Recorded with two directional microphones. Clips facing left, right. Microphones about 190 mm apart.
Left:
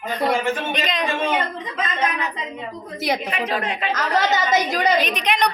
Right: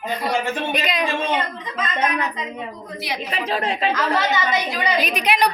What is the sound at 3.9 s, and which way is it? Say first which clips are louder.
A woman's voice: even; 45° left (ahead or behind).